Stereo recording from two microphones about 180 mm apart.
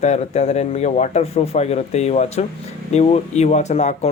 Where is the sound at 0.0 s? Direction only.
35° left (ahead or behind).